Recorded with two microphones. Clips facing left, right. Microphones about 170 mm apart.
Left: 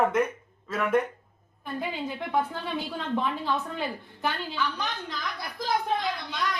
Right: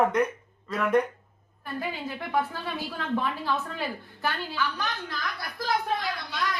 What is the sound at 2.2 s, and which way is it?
A woman's voice, 20° left (ahead or behind).